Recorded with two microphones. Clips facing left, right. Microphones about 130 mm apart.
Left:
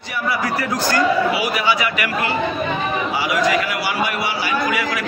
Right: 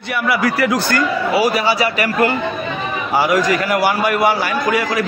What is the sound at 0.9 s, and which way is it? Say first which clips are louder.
A man's voice: right 1 dB; 40° right (ahead or behind).